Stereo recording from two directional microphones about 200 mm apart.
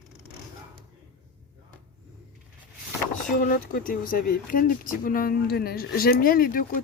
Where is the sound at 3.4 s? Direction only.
45° left (ahead or behind).